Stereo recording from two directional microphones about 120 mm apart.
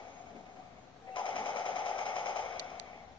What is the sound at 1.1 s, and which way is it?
Percussion, 45° left (ahead or behind).